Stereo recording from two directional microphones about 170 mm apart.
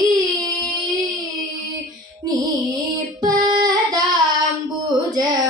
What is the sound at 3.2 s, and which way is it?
Child singing, 25° right (ahead or behind).